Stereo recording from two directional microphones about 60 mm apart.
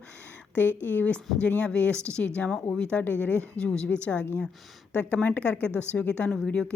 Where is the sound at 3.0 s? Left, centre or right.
Left.